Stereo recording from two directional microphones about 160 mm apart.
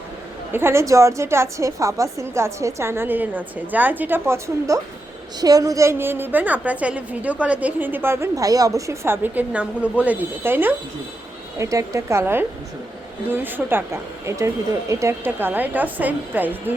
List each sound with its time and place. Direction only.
0.5 s a woman's voice: 15° right (ahead or behind)